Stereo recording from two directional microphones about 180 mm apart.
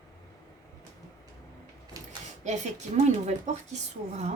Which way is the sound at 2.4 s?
40° right (ahead or behind).